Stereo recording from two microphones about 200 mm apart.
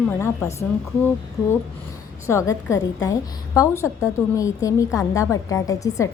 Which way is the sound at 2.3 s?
15° left (ahead or behind).